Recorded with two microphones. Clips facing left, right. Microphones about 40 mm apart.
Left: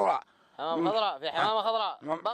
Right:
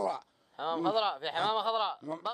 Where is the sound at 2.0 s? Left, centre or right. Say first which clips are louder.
Left 6 dB; left.